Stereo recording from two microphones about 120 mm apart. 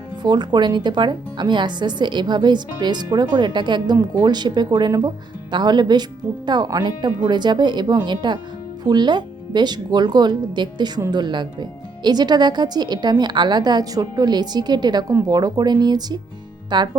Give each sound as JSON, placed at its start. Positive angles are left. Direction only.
{"t": 0.2, "sound": "speech", "side_deg": -35}